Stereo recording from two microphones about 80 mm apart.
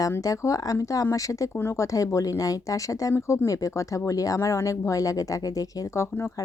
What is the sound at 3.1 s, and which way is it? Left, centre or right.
Speech, left.